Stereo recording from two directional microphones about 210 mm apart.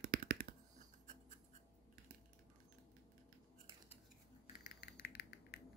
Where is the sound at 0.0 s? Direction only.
45° right (ahead or behind).